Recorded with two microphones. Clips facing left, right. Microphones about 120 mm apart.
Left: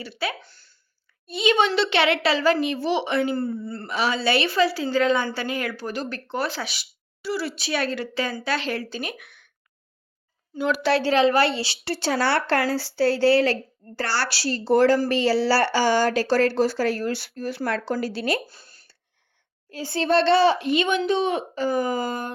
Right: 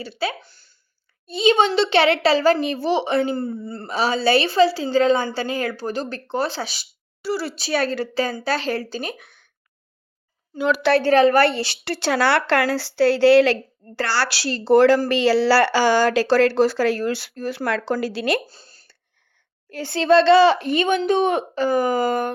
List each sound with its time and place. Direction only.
0.0 s a man's voice: 30° right (ahead or behind)
0.4 s a sound: 15° right (ahead or behind)
1.3 s a woman's voice: 30° right (ahead or behind)
3.3 s a man's voice: 20° right (ahead or behind)
3.8 s a woman's voice: 35° right (ahead or behind)
10.9 s a woman's voice: 50° right (ahead or behind); by 18.4 s 90° right
18.4 s a sound: 30° right (ahead or behind)
19.7 s speech: 70° right (ahead or behind); by 20.6 s 90° right
20.6 s a woman's voice: 45° right (ahead or behind); by 22.3 s 65° right (ahead or behind)